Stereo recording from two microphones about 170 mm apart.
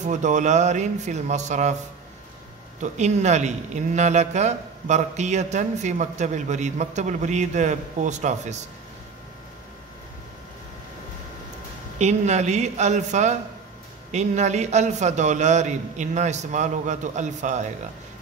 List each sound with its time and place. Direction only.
0.0 s a man's voice: 45° right (ahead or behind)
2.8 s a man's voice: 45° right (ahead or behind)
12.0 s a man's voice: 40° right (ahead or behind)